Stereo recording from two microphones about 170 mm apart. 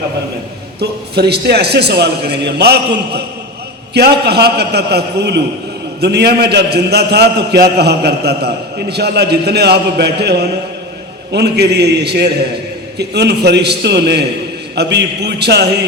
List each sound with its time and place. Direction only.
0.8 s a man's voice: 75° right (ahead or behind)